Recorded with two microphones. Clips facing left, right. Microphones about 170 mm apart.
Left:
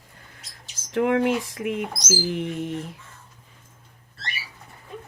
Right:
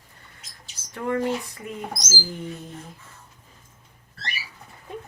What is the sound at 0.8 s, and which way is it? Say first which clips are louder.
Speech: left 5 dB; 90° left.